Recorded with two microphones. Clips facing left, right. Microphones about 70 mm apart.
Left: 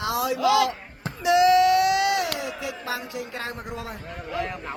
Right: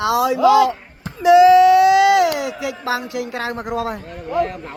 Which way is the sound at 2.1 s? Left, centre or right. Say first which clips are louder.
Right 10 dB; right.